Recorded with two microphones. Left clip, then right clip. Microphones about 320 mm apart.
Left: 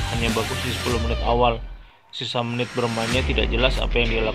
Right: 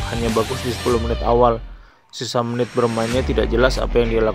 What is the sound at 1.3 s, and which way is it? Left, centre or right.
Speech, right.